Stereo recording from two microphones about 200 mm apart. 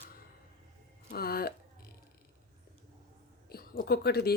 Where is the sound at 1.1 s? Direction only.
50° left (ahead or behind).